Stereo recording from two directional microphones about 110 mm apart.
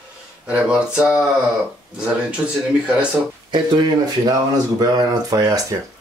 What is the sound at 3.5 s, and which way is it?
Speech, 45° right (ahead or behind).